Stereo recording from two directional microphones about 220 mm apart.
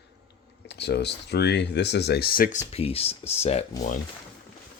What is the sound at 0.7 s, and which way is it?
Speech, 50° left (ahead or behind).